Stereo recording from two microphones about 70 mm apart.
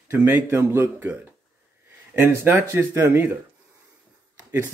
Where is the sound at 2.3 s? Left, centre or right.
Right.